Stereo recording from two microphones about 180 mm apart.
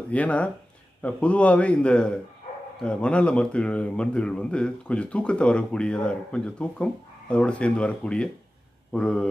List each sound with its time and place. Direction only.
0.1 s a man's voice: 5° left (ahead or behind)